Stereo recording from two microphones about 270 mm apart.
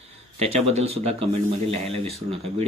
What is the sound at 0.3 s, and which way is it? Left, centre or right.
Speech, right.